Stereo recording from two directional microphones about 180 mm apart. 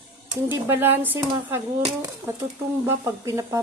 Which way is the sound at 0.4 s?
10° right (ahead or behind).